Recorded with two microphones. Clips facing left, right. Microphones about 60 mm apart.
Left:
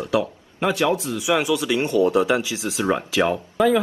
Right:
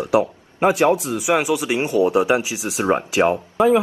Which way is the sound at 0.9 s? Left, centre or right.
Right.